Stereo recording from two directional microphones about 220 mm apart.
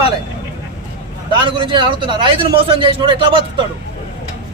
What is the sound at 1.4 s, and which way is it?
Speech, 20° right (ahead or behind).